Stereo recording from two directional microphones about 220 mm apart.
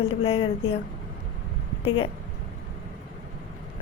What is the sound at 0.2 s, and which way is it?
Speech, 25° left (ahead or behind).